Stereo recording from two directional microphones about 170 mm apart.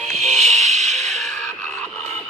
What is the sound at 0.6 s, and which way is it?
Music, 40° right (ahead or behind).